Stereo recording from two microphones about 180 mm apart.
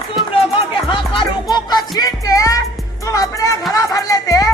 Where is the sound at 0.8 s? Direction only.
30° left (ahead or behind).